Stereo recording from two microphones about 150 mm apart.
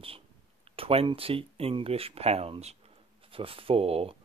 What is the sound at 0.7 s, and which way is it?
Speech, 40° right (ahead or behind).